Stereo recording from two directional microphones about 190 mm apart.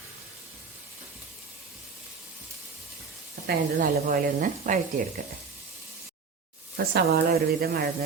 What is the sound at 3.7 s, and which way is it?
Cutlery, 45° right (ahead or behind).